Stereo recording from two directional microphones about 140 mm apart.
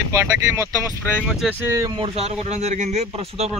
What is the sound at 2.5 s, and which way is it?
Speech, 55° right (ahead or behind).